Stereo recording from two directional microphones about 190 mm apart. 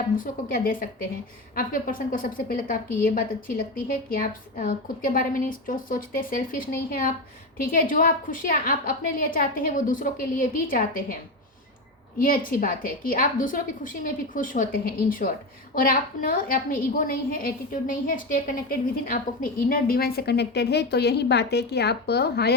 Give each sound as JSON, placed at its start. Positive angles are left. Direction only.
{"t": 0.2, "sound": "a woman's voice", "side_deg": 45}
{"t": 12.2, "sound": "a woman's voice", "side_deg": 45}